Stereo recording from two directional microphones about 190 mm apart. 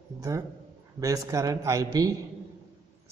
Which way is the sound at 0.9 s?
15° right (ahead or behind).